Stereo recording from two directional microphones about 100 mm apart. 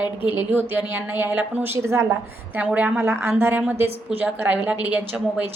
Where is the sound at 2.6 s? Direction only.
15° right (ahead or behind).